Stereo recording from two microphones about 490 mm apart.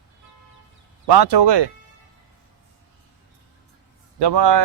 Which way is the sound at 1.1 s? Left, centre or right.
Right.